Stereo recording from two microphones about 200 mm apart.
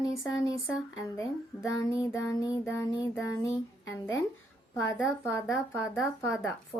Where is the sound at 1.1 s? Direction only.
15° left (ahead or behind).